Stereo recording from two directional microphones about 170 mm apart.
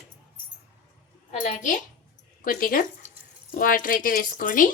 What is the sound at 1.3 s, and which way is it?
A woman's voice, 45° left (ahead or behind).